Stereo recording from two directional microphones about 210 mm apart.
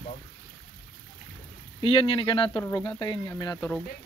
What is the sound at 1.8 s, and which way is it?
Speech, 25° left (ahead or behind).